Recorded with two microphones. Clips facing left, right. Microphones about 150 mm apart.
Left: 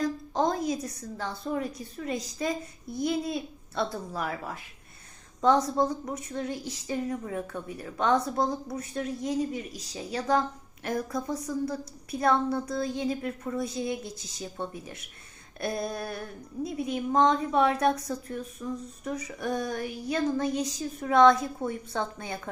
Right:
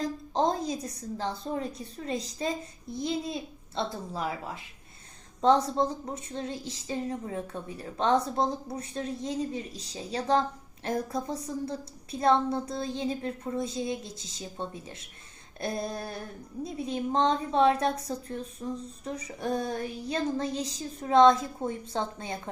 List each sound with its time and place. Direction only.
0.0 s a woman's voice: 30° right (ahead or behind)